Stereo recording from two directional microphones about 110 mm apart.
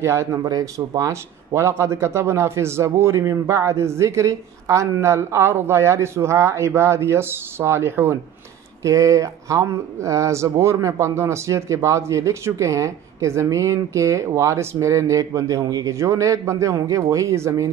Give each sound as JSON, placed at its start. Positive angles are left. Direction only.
{"t": 0.0, "sound": "speech", "side_deg": -25}